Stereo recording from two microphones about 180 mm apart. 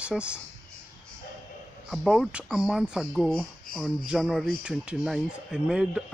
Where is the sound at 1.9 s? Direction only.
Centre (ahead or behind).